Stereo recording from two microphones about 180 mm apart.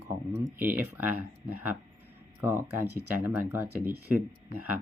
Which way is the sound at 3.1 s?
10° right (ahead or behind).